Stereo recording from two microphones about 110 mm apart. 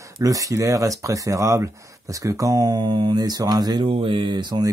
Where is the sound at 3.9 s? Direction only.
50° right (ahead or behind).